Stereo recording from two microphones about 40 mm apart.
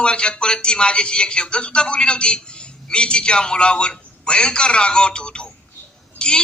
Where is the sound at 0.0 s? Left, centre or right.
Left.